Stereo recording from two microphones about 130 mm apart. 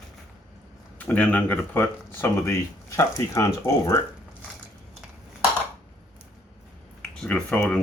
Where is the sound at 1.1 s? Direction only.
15° left (ahead or behind).